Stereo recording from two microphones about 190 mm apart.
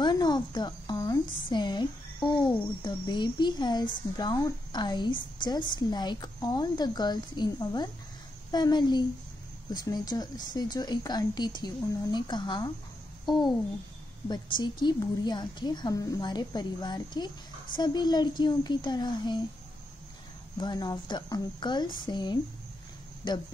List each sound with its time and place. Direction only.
0.0 s cricket: 20° left (ahead or behind)
1.5 s a woman's voice: 20° left (ahead or behind)
20.5 s a woman's voice: 20° left (ahead or behind)